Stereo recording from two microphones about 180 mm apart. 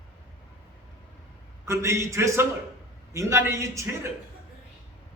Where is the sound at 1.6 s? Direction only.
15° right (ahead or behind).